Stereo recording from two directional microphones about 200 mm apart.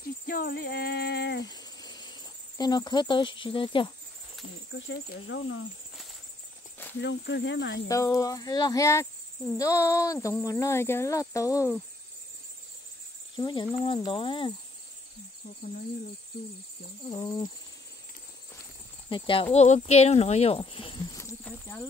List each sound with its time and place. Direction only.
0.3 s a sound: 50° left (ahead or behind)
1.5 s cricket: 20° left (ahead or behind)
4.7 s speech: 55° left (ahead or behind)
7.0 s speech: 60° left (ahead or behind)
7.9 s speech: 15° left (ahead or behind)
13.4 s speech: 20° left (ahead or behind)
17.1 s speech: 20° left (ahead or behind)
19.0 s speech: 25° left (ahead or behind)
21.2 s cricket: 10° left (ahead or behind)